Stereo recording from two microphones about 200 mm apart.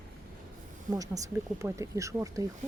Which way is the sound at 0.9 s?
15° right (ahead or behind).